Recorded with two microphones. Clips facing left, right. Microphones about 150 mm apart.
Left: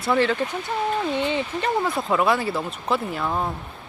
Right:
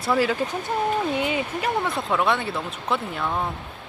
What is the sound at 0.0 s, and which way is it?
Speech, 5° right (ahead or behind).